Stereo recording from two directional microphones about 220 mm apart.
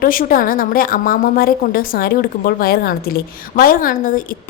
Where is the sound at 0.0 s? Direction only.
40° left (ahead or behind).